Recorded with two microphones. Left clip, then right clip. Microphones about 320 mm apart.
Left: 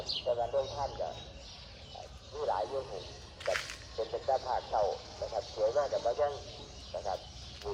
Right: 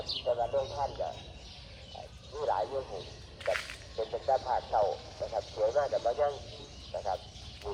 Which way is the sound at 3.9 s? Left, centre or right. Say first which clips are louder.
Right 2 dB; right.